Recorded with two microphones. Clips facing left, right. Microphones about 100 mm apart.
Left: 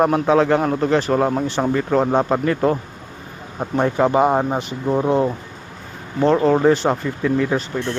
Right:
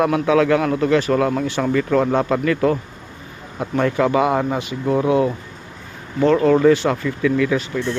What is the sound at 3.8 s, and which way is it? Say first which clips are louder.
Speech: left 1 dB; 30° left (ahead or behind).